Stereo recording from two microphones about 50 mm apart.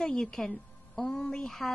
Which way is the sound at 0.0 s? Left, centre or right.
Centre.